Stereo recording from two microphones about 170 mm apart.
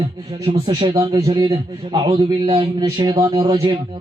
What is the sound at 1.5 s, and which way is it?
A man's voice, 30° right (ahead or behind).